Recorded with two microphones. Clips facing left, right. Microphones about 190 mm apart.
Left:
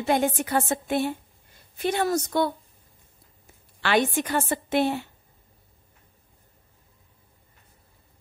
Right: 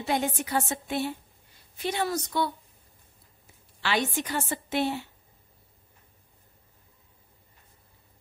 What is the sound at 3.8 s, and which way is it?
A woman's voice, 55° left (ahead or behind).